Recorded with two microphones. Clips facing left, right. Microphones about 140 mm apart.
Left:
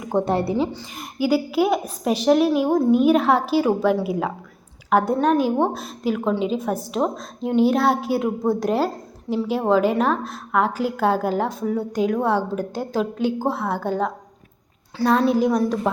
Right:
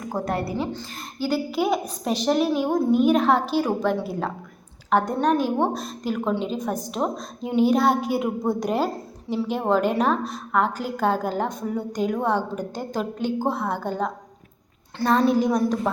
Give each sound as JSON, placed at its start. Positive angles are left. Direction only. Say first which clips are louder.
{"t": 0.1, "sound": "a woman's voice", "louder": "left 6 dB", "side_deg": 25}
{"t": 0.7, "sound": "a woman's voice", "louder": "right 1 dB", "side_deg": 10}